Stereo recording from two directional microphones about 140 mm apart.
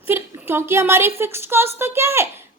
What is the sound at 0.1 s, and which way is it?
A woman's voice, 15° right (ahead or behind).